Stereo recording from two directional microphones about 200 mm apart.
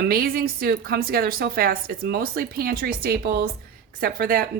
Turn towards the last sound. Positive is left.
turn(degrees=-45)  # may be behind; listen again after turning